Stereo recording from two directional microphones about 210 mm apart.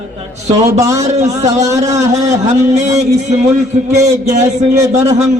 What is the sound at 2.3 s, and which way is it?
Speech, 35° right (ahead or behind).